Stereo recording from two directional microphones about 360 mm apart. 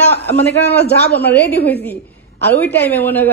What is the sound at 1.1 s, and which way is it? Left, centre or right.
A man's voice, centre.